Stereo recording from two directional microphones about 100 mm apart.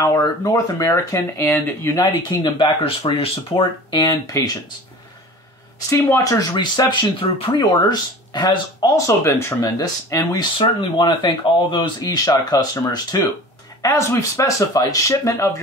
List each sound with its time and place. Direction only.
0.0 s speech: 35° left (ahead or behind)
2.4 s speech: 55° left (ahead or behind)
3.0 s speech: 70° left (ahead or behind); by 4.1 s 55° left (ahead or behind)
5.9 s speech: 25° left (ahead or behind)
6.4 s speech: 45° left (ahead or behind)
8.9 s speech: 30° left (ahead or behind)
10.6 s speech: 55° left (ahead or behind)
12.0 s speech: 40° left (ahead or behind)
13.8 s speech: 30° left (ahead or behind)